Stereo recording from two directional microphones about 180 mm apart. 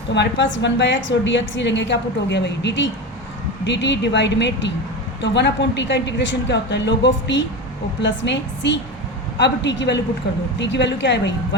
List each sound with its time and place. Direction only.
0.1 s a woman's voice: 80° left